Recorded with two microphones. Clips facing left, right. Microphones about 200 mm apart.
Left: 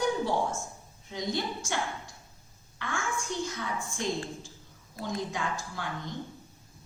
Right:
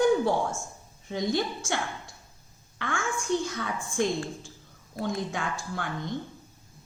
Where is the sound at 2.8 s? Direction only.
55° right (ahead or behind).